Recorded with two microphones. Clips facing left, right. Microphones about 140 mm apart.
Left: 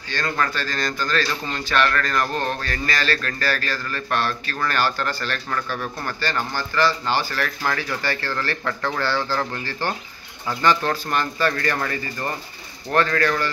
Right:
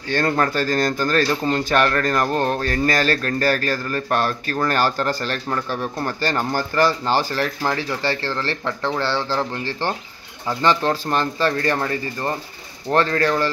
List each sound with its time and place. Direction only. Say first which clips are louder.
0.4 s speech: right 6 dB; 45° right (ahead or behind)
7.6 s speech: right 3 dB; 25° right (ahead or behind)